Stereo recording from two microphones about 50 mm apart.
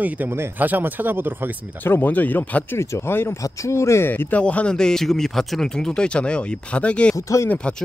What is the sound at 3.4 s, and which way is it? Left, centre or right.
Speech, left.